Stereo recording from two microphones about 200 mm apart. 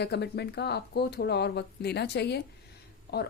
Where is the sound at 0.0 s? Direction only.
55° left (ahead or behind).